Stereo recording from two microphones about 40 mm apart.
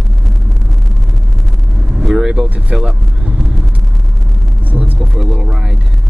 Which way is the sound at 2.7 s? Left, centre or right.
Right.